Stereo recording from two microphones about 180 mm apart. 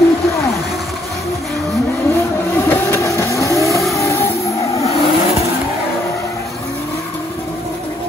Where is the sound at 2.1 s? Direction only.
10° left (ahead or behind).